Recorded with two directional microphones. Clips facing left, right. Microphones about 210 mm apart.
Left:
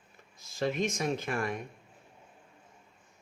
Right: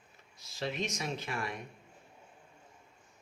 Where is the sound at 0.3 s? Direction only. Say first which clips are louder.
Left 6 dB; 50° left (ahead or behind).